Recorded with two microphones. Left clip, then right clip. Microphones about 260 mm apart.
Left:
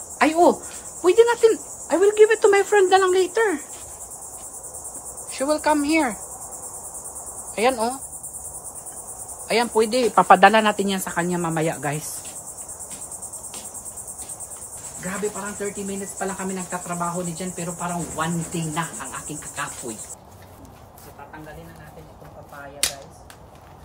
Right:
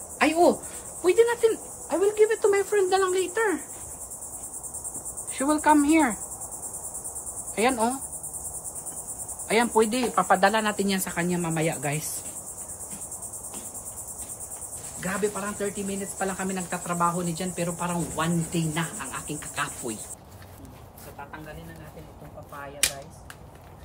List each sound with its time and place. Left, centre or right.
0.2 s speech: centre
5.3 s cricket: centre
7.5 s cricket: centre
9.5 s cricket: centre
10.2 s speech: left
10.9 s speech: centre
15.0 s speech: centre
16.2 s cricket: centre